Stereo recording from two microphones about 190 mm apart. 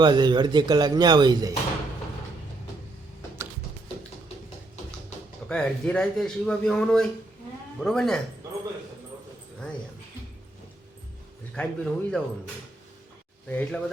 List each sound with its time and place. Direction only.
0.0 s speech: 25° right (ahead or behind)
5.5 s a man's voice: 5° left (ahead or behind)
11.5 s a man's voice: 5° left (ahead or behind)
13.5 s speech: 5° left (ahead or behind)